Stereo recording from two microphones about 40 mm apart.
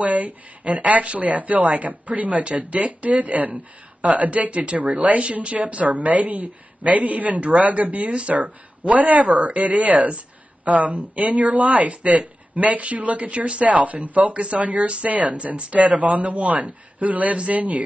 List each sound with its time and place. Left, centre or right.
0.0 s speech: right